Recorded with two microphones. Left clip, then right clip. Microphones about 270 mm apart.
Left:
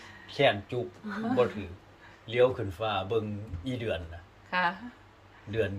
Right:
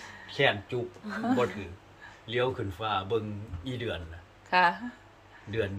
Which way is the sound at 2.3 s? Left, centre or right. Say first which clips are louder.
Left 4 dB; centre.